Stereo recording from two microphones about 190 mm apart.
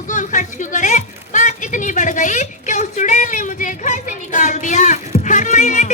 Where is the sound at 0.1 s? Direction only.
40° left (ahead or behind).